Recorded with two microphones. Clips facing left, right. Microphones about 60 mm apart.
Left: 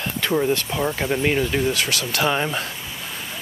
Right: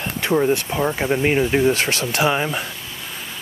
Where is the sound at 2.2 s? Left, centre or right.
Centre.